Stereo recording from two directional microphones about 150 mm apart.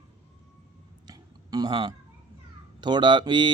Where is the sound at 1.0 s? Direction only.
25° right (ahead or behind).